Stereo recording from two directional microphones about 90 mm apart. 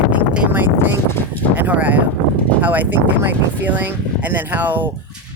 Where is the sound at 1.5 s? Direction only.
20° right (ahead or behind).